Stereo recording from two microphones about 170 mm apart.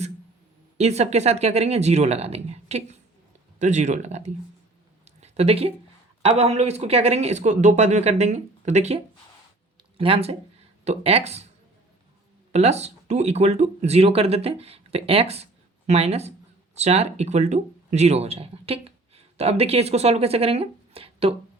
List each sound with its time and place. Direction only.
0.8 s speech: 40° right (ahead or behind)
5.0 s a sound: 40° right (ahead or behind)
6.2 s speech: 40° right (ahead or behind)
10.0 s speech: 35° right (ahead or behind)
12.5 s speech: 40° right (ahead or behind)